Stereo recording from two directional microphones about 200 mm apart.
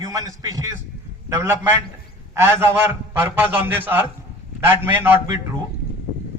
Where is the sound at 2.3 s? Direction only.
10° right (ahead or behind).